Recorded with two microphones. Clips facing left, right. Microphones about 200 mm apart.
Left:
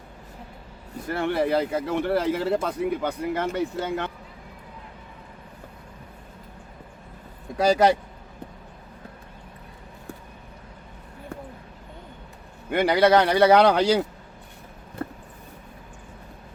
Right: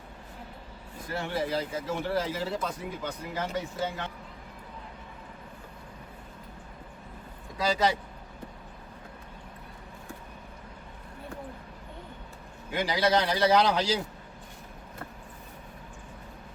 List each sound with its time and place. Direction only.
1.0 s speech: 65° left (ahead or behind)
12.7 s speech: 60° left (ahead or behind)